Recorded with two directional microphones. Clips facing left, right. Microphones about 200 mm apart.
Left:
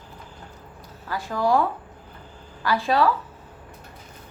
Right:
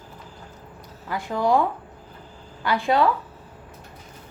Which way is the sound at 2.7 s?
20° right (ahead or behind).